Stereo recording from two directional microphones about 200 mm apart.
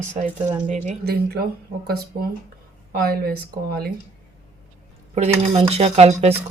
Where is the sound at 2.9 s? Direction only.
50° right (ahead or behind).